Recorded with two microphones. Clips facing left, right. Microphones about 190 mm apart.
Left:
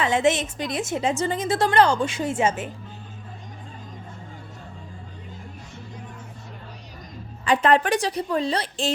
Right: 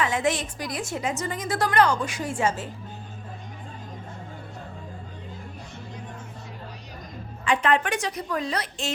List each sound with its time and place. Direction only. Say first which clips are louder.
0.0 s a woman's voice: left 4 dB; 25° left (ahead or behind)
7.4 s a woman's voice: left 4 dB; 35° left (ahead or behind)